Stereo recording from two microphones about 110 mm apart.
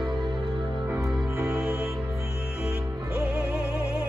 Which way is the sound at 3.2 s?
5° right (ahead or behind).